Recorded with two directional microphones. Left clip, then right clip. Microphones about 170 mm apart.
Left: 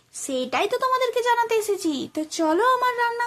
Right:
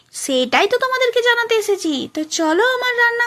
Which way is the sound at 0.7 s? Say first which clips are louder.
Right 5 dB; 10° right (ahead or behind).